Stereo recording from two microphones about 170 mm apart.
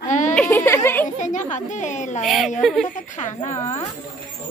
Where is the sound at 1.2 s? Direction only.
45° left (ahead or behind).